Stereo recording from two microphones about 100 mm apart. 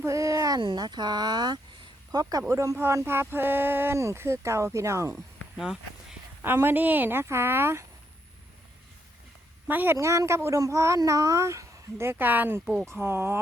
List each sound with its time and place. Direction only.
0.0 s a sound: 30° right (ahead or behind)
0.6 s a woman's voice: 50° right (ahead or behind)
2.5 s speech: 30° right (ahead or behind)
5.5 s walk: 5° right (ahead or behind)
6.4 s speech: 20° right (ahead or behind)
9.6 s a woman's voice: 20° right (ahead or behind)
12.1 s speech: 20° right (ahead or behind)